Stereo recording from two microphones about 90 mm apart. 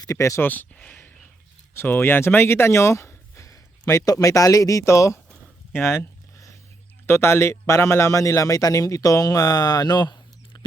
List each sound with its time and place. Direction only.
0.0 s a man's voice: 35° left (ahead or behind)
0.4 s speech: 20° left (ahead or behind)
5.7 s a sound: 25° left (ahead or behind)
7.1 s a man's voice: 30° left (ahead or behind); by 10.7 s 55° left (ahead or behind)